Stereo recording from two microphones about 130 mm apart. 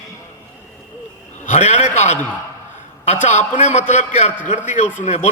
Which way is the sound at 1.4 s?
60° left (ahead or behind).